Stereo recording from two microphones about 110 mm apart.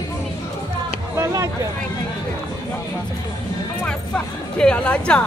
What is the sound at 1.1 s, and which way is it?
Music, 25° right (ahead or behind).